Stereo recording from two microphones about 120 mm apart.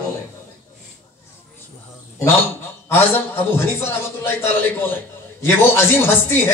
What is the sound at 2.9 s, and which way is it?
A man's voice, 20° left (ahead or behind).